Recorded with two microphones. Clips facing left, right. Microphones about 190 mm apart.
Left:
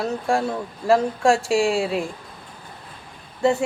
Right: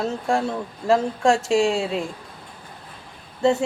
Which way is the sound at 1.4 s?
20° right (ahead or behind).